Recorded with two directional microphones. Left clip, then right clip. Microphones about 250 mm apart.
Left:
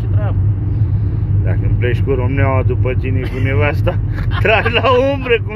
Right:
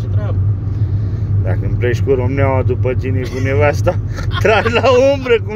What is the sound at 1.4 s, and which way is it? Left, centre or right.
Speech, right.